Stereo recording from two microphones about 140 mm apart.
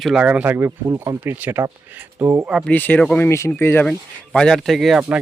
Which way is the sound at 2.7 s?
15° left (ahead or behind).